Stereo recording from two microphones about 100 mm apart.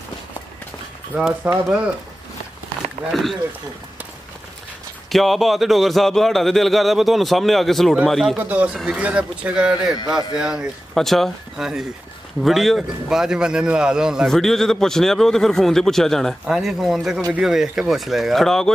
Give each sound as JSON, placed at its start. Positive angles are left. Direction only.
{"t": 1.4, "sound": "speech", "side_deg": -15}
{"t": 3.1, "sound": "a man's voice", "side_deg": 0}
{"t": 5.1, "sound": "a man's voice", "side_deg": 0}
{"t": 8.4, "sound": "speech", "side_deg": -15}
{"t": 8.7, "sound": "a man's voice", "side_deg": 0}